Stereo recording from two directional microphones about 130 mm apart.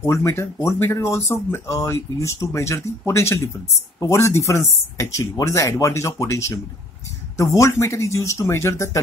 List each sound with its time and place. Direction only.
0.0 s speech: 20° left (ahead or behind)